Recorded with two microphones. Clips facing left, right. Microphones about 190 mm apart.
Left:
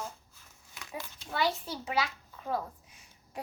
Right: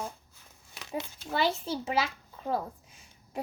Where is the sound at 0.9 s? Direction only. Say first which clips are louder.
Right 4 dB; 25° right (ahead or behind).